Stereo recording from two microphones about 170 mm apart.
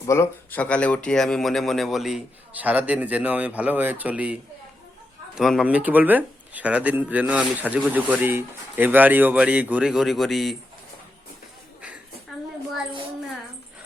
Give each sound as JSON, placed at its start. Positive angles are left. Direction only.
{"t": 0.0, "sound": "speech", "side_deg": 15}